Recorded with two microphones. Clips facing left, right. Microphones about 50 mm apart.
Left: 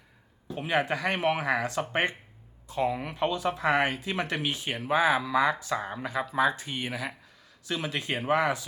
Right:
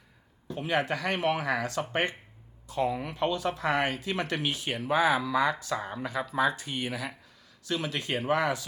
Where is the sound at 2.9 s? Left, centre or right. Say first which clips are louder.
Even; centre.